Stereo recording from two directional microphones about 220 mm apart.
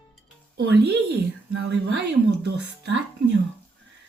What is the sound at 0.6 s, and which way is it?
A woman's voice, 50° right (ahead or behind).